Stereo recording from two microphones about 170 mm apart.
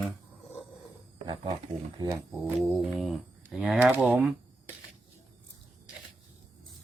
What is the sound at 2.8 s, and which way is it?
Speech, centre (ahead or behind).